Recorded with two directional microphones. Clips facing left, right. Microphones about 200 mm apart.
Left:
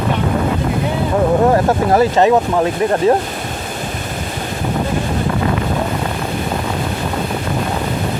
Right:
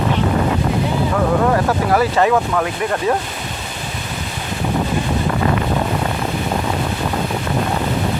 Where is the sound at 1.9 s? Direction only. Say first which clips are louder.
Left 3 dB; 25° left (ahead or behind).